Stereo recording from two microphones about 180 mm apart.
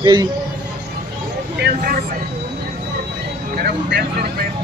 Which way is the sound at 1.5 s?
60° right (ahead or behind).